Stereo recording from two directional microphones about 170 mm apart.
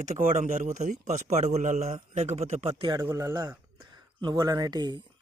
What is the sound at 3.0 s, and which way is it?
Speech, 15° right (ahead or behind).